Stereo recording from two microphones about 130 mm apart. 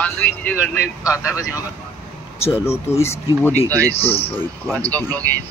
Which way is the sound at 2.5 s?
20° left (ahead or behind).